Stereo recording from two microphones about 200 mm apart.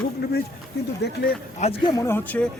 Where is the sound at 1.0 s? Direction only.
55° left (ahead or behind).